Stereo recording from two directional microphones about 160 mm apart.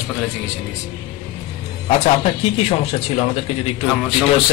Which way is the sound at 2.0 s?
40° left (ahead or behind).